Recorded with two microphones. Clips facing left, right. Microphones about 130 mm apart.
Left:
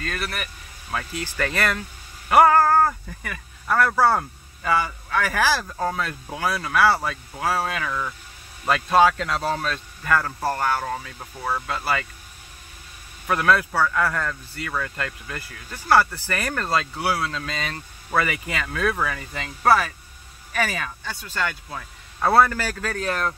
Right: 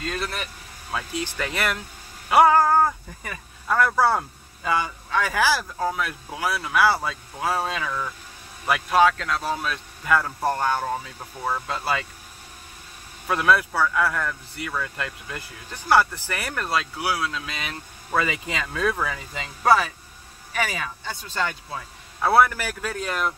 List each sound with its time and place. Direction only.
0.0 s speech: 20° right (ahead or behind)
8.9 s speech: 5° left (ahead or behind)
9.5 s speech: 10° right (ahead or behind)
11.6 s speech: 20° right (ahead or behind)
13.3 s speech: 15° right (ahead or behind)
21.6 s speech: 10° right (ahead or behind)